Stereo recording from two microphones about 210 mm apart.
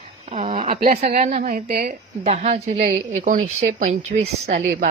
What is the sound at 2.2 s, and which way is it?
Speech, 30° right (ahead or behind).